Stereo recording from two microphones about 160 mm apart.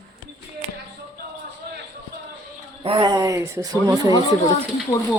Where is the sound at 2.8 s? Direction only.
30° right (ahead or behind).